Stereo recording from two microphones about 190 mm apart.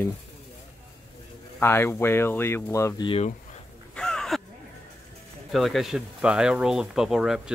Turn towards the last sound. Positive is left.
turn(degrees=0)  # may be behind; listen again after turning